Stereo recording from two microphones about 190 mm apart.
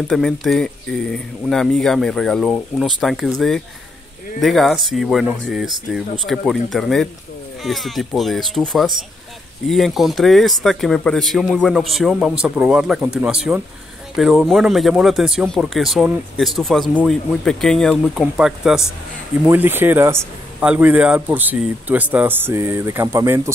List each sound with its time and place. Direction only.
0.1 s a man's voice: centre (ahead or behind)